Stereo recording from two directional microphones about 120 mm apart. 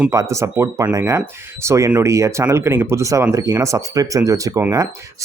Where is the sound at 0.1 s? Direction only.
25° right (ahead or behind).